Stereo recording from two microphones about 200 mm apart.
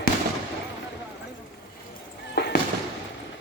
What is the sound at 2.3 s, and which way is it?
Fireworks, 55° left (ahead or behind).